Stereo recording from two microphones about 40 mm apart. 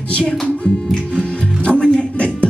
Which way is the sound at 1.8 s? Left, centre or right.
Left.